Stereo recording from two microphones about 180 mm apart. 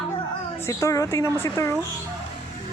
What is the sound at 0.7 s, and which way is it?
A woman's voice, 15° left (ahead or behind).